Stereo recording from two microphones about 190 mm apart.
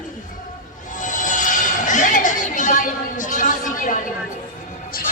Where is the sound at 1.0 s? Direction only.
40° left (ahead or behind).